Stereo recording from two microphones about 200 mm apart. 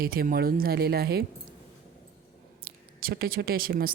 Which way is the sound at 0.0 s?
45° right (ahead or behind).